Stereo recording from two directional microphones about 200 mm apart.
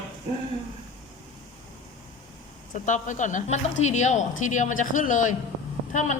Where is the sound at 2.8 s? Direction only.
40° left (ahead or behind).